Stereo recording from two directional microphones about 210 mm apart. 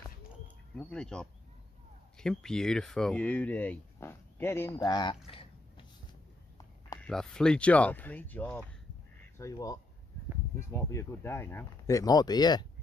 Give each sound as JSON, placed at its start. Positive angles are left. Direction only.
{"t": 0.7, "sound": "speech", "side_deg": 5}
{"t": 7.0, "sound": "speech", "side_deg": 5}